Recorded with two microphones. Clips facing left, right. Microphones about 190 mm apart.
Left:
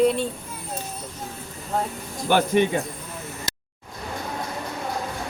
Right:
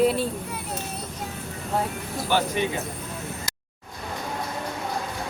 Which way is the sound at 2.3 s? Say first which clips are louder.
Left 4 dB; 55° left (ahead or behind).